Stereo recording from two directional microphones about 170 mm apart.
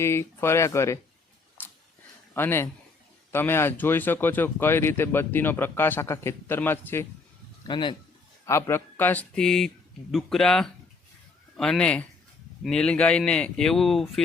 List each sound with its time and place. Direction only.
0.0 s speech: 15° left (ahead or behind)
1.6 s a sound: 10° left (ahead or behind)
2.3 s speech: 15° left (ahead or behind)
7.7 s speech: 30° left (ahead or behind)
8.4 s speech: 15° left (ahead or behind)